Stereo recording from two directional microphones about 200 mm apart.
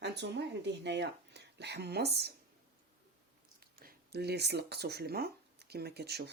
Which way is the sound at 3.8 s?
55° right (ahead or behind).